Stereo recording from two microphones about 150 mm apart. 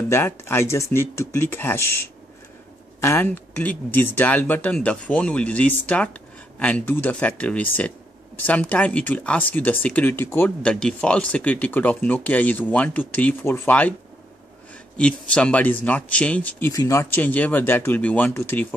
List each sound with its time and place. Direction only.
0.1 s speech: 15° left (ahead or behind)
15.0 s speech: 5° left (ahead or behind)